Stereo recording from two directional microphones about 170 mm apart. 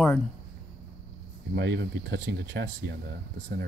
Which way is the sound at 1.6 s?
90° right.